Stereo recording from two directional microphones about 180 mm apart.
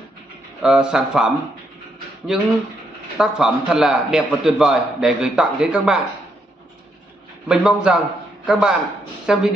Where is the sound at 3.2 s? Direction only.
5° right (ahead or behind).